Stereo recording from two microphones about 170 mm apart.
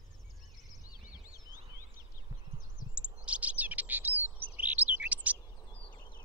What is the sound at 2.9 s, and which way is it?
Chirp, 5° right (ahead or behind).